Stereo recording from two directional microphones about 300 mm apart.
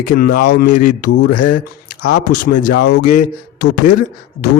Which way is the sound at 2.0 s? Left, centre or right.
Left.